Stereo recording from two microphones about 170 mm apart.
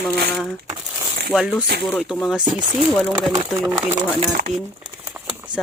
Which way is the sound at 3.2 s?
25° right (ahead or behind).